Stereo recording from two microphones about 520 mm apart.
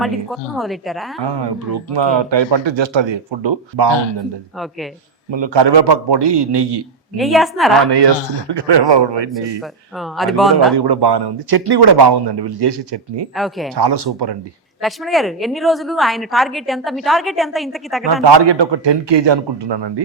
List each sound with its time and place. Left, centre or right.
0.0 s a woman's voice: centre
1.2 s speech: right
5.3 s speech: right
7.2 s a woman's voice: centre
7.8 s speech: right
9.6 s a woman's voice: centre
10.8 s speech: right
13.3 s a woman's voice: centre
13.7 s speech: right
14.8 s a woman's voice: centre
18.0 s speech: right